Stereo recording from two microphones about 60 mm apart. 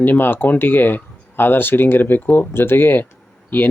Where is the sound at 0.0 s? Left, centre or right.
Left.